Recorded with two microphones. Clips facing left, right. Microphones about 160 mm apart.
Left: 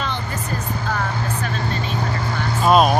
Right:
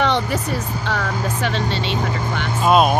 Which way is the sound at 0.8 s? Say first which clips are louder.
Right 1 dB; 85° right.